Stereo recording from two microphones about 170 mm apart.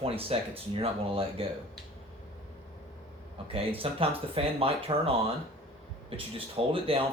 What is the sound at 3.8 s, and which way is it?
Speech, 35° right (ahead or behind).